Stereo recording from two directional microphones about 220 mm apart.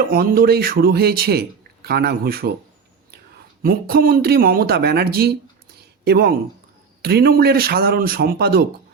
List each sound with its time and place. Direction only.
0.1 s speech: 40° right (ahead or behind)
3.6 s speech: 45° right (ahead or behind)
5.7 s a sound: 45° right (ahead or behind)
7.0 s speech: 45° right (ahead or behind)